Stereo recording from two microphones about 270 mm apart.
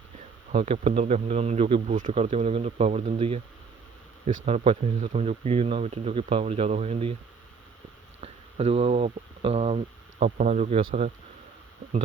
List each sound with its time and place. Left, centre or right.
0.5 s speech: right
4.4 s speech: right
8.2 s speech: right